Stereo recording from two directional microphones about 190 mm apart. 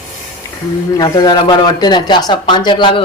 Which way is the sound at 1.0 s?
20° left (ahead or behind).